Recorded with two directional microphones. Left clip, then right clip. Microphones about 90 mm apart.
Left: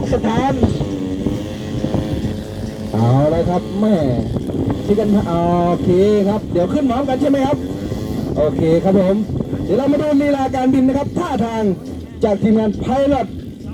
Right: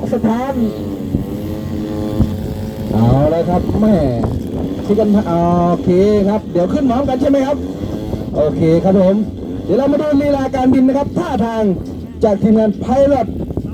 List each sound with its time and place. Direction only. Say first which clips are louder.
0.1 s speech: even; 50° left (ahead or behind)
3.0 s a sound: right 2 dB; 5° right (ahead or behind); by 4.1 s 25° right (ahead or behind)
4.9 s speech: right 6 dB; 35° right (ahead or behind)
8.6 s speech: right 3 dB; 45° right (ahead or behind)